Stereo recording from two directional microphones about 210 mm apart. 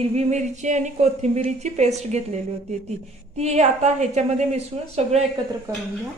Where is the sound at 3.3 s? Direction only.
30° right (ahead or behind).